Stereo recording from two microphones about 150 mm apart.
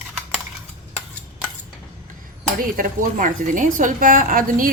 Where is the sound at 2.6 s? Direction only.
70° right (ahead or behind).